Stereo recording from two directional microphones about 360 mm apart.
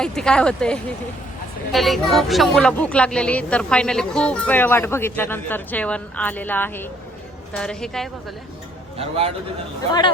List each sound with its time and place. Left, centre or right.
0.0 s a woman's voice: centre
9.0 s a man's voice: centre